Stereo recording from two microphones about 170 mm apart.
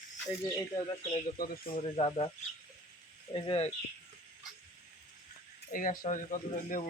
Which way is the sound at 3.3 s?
30° left (ahead or behind).